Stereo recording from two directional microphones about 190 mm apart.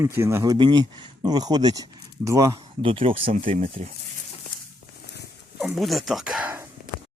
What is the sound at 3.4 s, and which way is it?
Speech, 45° right (ahead or behind).